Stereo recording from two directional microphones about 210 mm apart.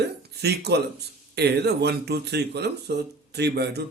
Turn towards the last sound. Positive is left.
turn(degrees=-50)  # may be behind; listen again after turning